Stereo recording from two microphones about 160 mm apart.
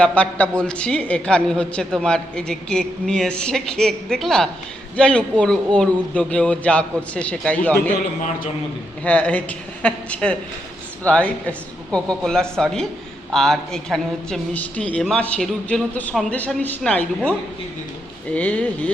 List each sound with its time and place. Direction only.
0.0 s a man's voice: 10° left (ahead or behind)
9.0 s a man's voice: 10° left (ahead or behind)
18.3 s a man's voice: 10° left (ahead or behind)